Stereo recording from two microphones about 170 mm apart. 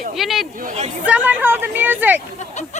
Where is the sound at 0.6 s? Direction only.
45° right (ahead or behind).